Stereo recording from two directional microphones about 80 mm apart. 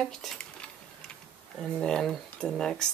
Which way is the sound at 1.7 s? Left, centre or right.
Centre.